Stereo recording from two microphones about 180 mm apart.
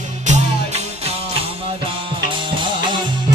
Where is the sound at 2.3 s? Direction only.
25° right (ahead or behind).